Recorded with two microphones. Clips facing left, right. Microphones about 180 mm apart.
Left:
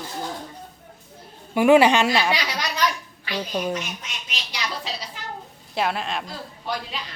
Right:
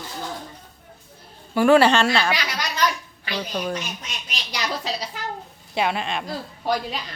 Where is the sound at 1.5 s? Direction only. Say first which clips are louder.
Even; 15° left (ahead or behind).